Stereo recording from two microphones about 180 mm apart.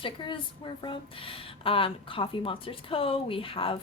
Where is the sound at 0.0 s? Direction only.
25° left (ahead or behind).